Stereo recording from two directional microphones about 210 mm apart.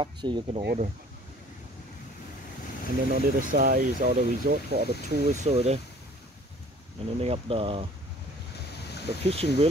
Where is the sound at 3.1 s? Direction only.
40° right (ahead or behind).